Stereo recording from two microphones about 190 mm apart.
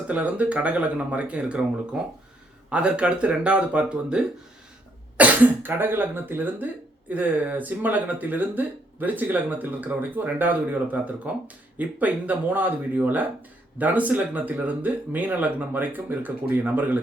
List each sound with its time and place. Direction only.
0.1 s speech: 5° right (ahead or behind)